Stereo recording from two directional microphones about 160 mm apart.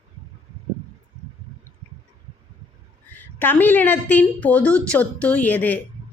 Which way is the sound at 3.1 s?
10° left (ahead or behind).